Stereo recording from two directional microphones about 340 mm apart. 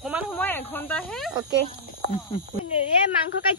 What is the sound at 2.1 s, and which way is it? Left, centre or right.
Speech, centre.